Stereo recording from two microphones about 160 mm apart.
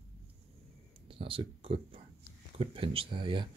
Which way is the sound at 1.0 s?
35° right (ahead or behind).